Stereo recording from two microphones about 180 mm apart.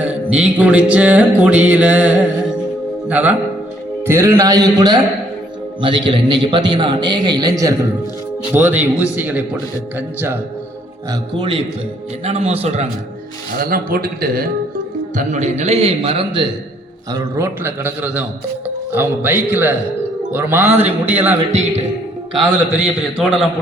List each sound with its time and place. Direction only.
0.0 s music: 5° right (ahead or behind)
4.0 s a man's voice: 15° right (ahead or behind)
8.5 s music: 10° right (ahead or behind)
11.1 s a man's voice: 25° right (ahead or behind)
13.6 s speech: 55° right (ahead or behind)
15.1 s a man's voice: 45° right (ahead or behind); by 16.5 s 30° right (ahead or behind)
17.1 s music: 15° right (ahead or behind)
22.4 s a man's voice: centre (ahead or behind)